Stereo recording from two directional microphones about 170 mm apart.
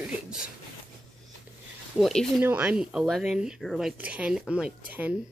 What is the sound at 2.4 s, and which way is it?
Speech, 10° right (ahead or behind).